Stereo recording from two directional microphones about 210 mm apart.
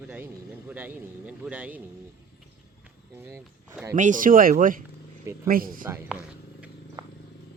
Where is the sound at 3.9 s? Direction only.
40° right (ahead or behind).